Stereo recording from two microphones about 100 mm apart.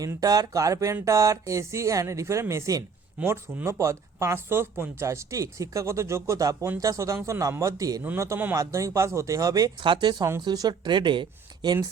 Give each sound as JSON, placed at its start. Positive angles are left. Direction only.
{"t": 0.0, "sound": "a woman's voice", "side_deg": -35}
{"t": 9.8, "sound": "speech", "side_deg": -50}